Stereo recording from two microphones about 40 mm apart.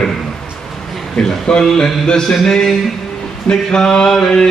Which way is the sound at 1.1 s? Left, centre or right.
Centre.